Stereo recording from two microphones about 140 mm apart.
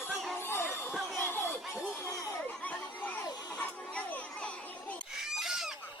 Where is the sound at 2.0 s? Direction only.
20° left (ahead or behind).